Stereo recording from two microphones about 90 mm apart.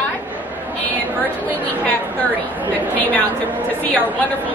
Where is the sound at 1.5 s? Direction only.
20° left (ahead or behind).